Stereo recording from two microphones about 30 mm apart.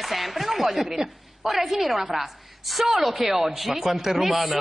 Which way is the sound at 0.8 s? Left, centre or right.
Centre.